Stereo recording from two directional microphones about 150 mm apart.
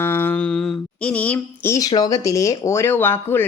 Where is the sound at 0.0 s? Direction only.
15° left (ahead or behind).